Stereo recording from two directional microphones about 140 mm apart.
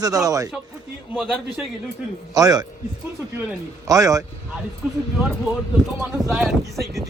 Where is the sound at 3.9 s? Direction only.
25° right (ahead or behind).